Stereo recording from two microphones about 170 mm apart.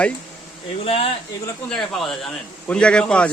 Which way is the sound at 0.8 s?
35° left (ahead or behind).